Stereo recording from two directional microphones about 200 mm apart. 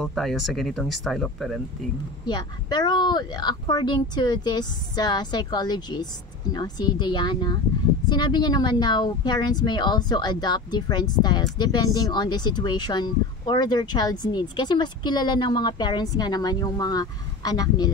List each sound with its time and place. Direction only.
0.0 s speech: centre (ahead or behind)
2.2 s speech: 20° left (ahead or behind)